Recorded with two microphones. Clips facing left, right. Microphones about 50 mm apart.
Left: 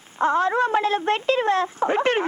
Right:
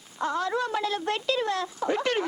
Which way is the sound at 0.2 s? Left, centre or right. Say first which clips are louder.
Left 8 dB; left.